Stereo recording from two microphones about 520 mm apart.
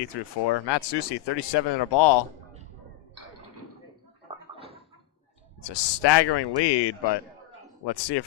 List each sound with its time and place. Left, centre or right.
0.0 s speech: left
5.6 s speech: left